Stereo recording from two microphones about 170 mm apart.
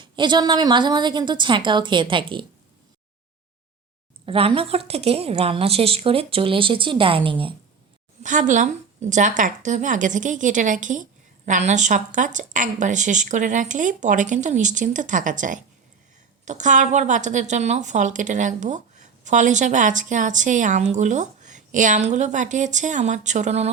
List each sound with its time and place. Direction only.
0.0 s a woman's voice: 25° right (ahead or behind)
4.3 s a woman's voice: 35° right (ahead or behind)
8.2 s a woman's voice: 50° right (ahead or behind)